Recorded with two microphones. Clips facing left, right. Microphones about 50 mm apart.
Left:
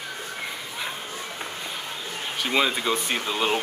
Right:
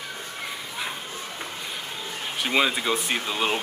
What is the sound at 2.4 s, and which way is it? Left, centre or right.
Speech, centre.